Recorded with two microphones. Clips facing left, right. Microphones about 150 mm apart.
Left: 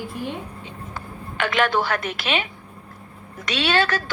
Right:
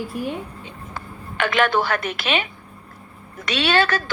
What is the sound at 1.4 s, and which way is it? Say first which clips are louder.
A woman's voice: right 1 dB; 60° right (ahead or behind).